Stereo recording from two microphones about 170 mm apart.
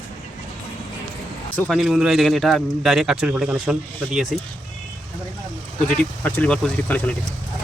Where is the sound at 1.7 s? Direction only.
Centre (ahead or behind).